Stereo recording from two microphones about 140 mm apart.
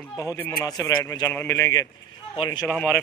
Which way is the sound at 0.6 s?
25° left (ahead or behind).